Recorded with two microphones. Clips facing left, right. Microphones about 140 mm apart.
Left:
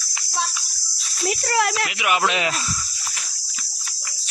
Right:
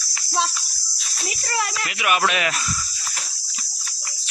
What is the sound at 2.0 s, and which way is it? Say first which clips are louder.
Speech: right 2 dB; 20° left (ahead or behind).